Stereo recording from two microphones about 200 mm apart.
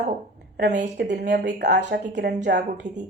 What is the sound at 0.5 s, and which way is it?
Speech, 55° right (ahead or behind).